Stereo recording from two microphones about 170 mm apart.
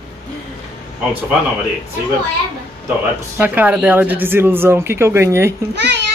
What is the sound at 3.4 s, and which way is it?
Speech, 10° right (ahead or behind).